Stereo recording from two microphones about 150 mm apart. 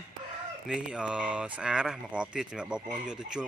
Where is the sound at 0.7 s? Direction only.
5° right (ahead or behind).